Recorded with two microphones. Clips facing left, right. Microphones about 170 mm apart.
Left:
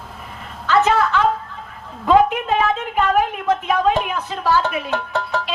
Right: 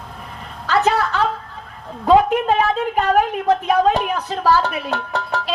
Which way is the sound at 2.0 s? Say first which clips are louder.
Right 1 dB; 40° right (ahead or behind).